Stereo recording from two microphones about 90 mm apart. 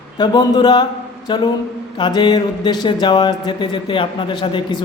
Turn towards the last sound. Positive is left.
turn(degrees=65)  # may be behind; listen again after turning